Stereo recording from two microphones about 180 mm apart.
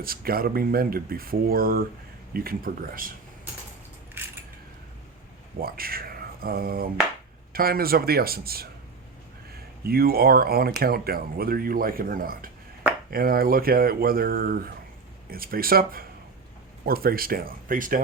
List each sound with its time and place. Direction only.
0.0 s speech: 55° right (ahead or behind)
4.2 s a sound: 10° right (ahead or behind)
5.5 s speech: 55° right (ahead or behind)
9.8 s speech: 55° right (ahead or behind)